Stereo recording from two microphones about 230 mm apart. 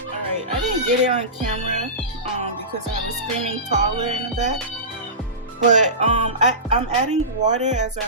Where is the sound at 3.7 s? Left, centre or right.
Right.